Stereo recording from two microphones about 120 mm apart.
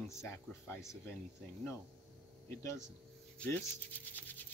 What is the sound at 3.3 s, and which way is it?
Speech, 15° left (ahead or behind).